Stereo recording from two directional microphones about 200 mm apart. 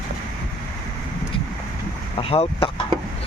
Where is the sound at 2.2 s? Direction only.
30° left (ahead or behind).